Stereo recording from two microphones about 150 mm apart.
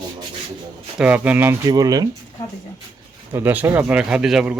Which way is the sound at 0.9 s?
10° right (ahead or behind).